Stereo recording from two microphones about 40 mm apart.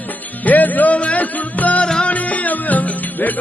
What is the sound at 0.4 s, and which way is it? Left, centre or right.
Music, left.